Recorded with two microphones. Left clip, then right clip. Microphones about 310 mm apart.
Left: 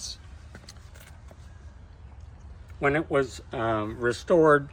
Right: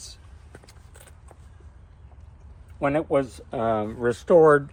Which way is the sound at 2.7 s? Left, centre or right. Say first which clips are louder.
Right 2 dB; centre.